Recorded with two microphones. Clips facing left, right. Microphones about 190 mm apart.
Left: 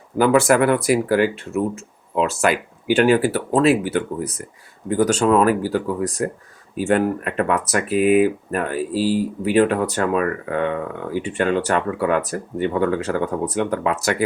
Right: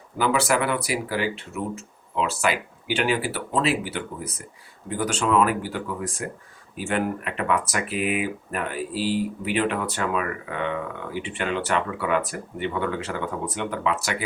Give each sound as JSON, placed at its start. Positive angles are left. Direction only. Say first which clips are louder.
{"t": 0.2, "sound": "speech", "louder": "left 7 dB", "side_deg": 50}